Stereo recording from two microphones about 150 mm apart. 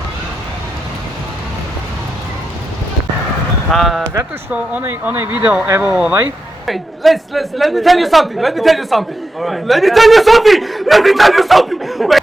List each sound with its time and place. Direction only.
3.7 s a woman's voice: centre (ahead or behind)
4.1 s a woman's voice: 10° right (ahead or behind)